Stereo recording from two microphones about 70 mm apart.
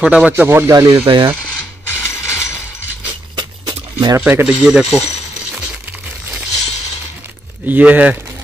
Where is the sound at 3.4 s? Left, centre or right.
Right.